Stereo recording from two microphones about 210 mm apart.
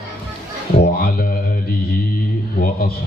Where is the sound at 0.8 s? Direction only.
45° left (ahead or behind).